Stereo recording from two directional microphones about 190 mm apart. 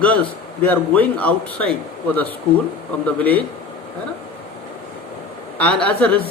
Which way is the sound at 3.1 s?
10° left (ahead or behind).